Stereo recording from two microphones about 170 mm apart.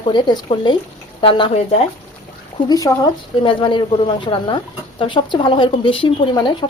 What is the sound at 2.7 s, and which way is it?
A woman's voice, 20° left (ahead or behind).